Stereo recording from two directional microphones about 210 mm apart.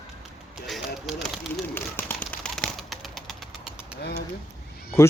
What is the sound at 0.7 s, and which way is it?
Speech, centre (ahead or behind).